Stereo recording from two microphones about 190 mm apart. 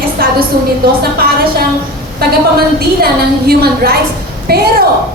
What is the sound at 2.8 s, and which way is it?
A woman's voice, 55° right (ahead or behind).